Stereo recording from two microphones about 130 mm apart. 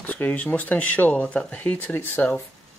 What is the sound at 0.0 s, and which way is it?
Speech, 10° left (ahead or behind).